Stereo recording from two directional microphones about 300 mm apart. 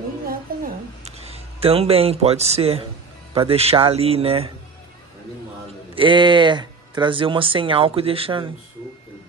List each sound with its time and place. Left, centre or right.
0.5 s a sound: right
1.0 s speech: centre
5.9 s speech: centre